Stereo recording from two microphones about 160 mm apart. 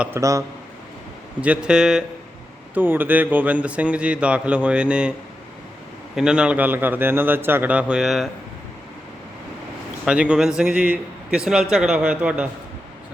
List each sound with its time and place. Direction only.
0.0 s speech: 15° right (ahead or behind)
1.4 s a man's voice: 5° right (ahead or behind)
6.1 s a man's voice: 5° right (ahead or behind)
10.1 s a man's voice: 5° right (ahead or behind)